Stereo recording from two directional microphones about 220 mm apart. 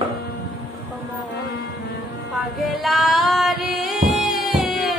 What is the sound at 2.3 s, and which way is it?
Female singing, centre (ahead or behind).